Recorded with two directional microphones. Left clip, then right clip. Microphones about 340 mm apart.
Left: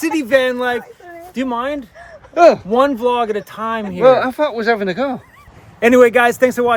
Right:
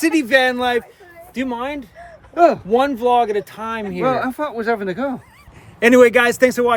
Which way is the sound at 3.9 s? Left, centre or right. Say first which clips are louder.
Left 9 dB; left.